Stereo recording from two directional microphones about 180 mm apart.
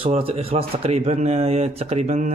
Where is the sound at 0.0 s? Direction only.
35° right (ahead or behind).